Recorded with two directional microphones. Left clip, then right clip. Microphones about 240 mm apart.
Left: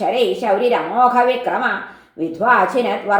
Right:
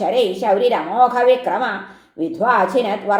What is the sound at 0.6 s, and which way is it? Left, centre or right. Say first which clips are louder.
Speech: even; right.